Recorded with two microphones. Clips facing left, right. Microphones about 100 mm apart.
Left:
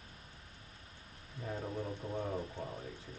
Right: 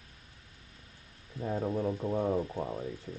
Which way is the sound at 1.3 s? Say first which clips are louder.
Right 8 dB; 35° right (ahead or behind).